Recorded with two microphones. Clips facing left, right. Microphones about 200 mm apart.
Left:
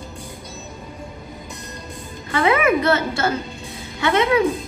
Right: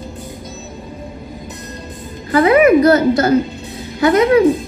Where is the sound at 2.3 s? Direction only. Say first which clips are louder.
Right 8 dB; 35° right (ahead or behind).